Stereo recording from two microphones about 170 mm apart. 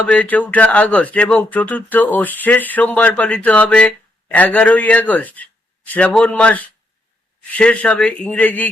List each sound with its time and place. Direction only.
0.1 s speech: 10° left (ahead or behind)